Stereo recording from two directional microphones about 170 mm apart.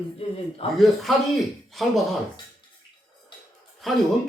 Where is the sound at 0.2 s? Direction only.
35° left (ahead or behind).